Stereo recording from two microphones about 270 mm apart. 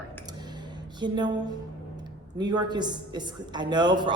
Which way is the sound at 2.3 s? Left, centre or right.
Centre.